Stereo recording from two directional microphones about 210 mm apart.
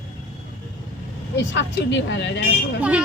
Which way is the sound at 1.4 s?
60° left (ahead or behind).